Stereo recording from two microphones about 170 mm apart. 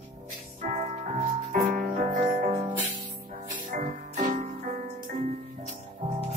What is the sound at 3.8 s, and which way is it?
Music, 50° right (ahead or behind).